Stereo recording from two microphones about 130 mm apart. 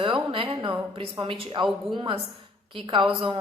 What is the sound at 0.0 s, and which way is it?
A woman's voice, 40° right (ahead or behind).